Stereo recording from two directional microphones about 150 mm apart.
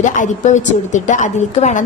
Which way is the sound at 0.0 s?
55° left (ahead or behind).